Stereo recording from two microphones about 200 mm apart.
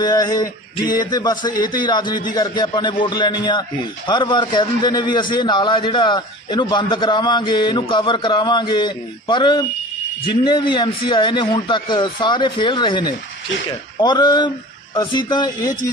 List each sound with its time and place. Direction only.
0.0 s a man's voice: 20° left (ahead or behind)